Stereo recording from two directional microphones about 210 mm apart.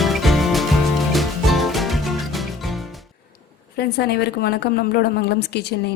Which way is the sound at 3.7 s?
50° left (ahead or behind).